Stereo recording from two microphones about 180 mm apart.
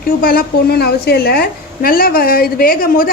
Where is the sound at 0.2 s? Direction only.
55° left (ahead or behind).